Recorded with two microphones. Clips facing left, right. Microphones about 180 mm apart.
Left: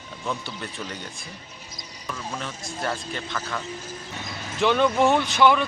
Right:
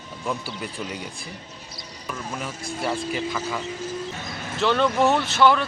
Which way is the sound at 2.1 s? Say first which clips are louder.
Right 1 dB; 10° right (ahead or behind).